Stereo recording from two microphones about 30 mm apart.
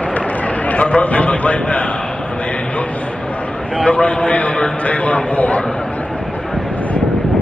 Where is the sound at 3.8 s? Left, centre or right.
Left.